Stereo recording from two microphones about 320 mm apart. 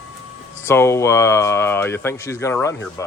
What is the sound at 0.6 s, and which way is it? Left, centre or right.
Speech, centre.